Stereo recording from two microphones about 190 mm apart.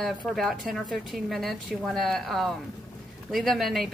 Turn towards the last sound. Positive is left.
turn(degrees=0)  # may be behind; listen again after turning